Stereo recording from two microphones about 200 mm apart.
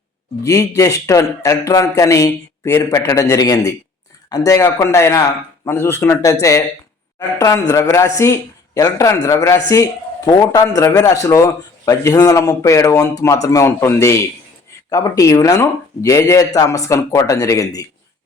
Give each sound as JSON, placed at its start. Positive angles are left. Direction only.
{"t": 0.4, "sound": "speech", "side_deg": 15}